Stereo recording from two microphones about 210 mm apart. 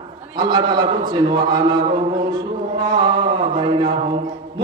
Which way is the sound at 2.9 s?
25° right (ahead or behind).